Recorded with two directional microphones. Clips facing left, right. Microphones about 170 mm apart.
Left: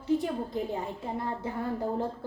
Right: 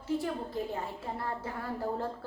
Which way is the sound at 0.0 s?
20° left (ahead or behind).